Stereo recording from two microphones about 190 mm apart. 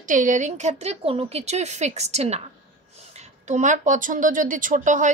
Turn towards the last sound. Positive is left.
turn(degrees=-40)  # may be behind; listen again after turning